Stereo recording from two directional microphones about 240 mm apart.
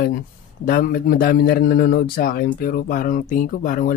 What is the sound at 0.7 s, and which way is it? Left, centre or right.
A man's voice, left.